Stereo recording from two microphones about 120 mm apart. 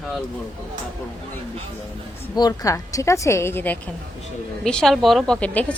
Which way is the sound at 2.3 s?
35° left (ahead or behind).